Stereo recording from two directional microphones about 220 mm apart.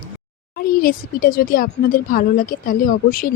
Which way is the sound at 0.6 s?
40° left (ahead or behind).